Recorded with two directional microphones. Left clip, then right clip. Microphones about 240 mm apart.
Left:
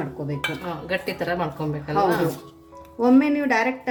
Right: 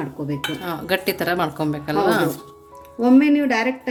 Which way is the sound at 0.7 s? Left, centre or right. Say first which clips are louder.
Right 5 dB; right.